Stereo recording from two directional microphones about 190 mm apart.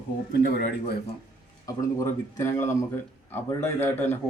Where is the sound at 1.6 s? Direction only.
15° left (ahead or behind).